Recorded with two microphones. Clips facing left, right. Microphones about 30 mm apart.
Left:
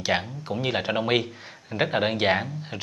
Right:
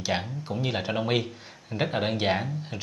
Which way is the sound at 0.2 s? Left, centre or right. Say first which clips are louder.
Left 2 dB; centre.